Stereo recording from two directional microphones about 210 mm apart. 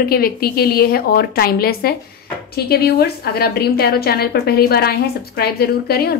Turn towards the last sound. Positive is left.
turn(degrees=45)  # may be behind; listen again after turning